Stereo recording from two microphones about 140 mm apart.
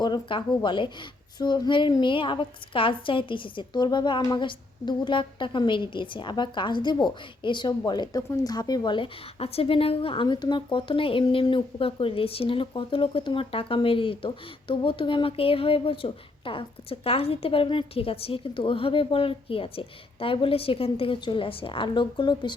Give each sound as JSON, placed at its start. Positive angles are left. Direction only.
{"t": 0.0, "sound": "a woman's voice", "side_deg": 35}